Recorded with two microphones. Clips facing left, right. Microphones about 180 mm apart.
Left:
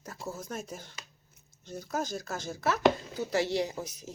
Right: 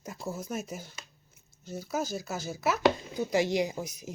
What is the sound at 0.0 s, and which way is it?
Speech, 10° right (ahead or behind).